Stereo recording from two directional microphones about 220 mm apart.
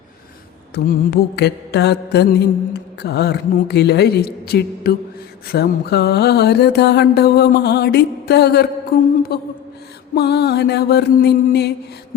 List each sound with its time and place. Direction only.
0.7 s mantra: 45° left (ahead or behind)